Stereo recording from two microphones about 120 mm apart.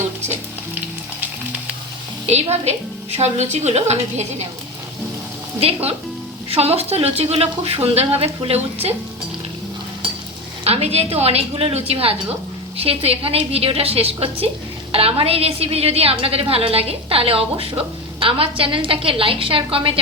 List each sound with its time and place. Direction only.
2.2 s a woman's voice: 65° right (ahead or behind)
5.5 s a woman's voice: 55° right (ahead or behind)
10.6 s a woman's voice: 60° right (ahead or behind)